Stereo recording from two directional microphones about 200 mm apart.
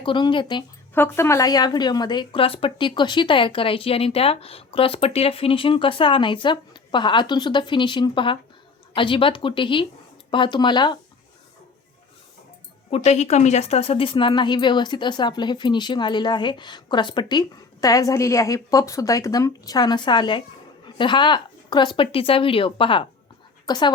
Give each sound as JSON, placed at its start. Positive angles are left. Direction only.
{"t": 0.0, "sound": "a woman's voice", "side_deg": 25}
{"t": 0.9, "sound": "a woman's voice", "side_deg": 10}
{"t": 12.9, "sound": "a woman's voice", "side_deg": 35}